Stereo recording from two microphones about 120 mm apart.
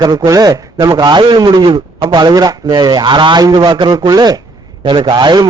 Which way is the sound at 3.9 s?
30° right (ahead or behind).